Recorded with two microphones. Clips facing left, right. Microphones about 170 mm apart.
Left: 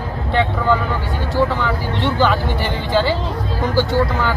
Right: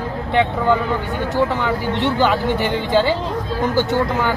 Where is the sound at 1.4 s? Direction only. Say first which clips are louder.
Left 1 dB; 20° right (ahead or behind).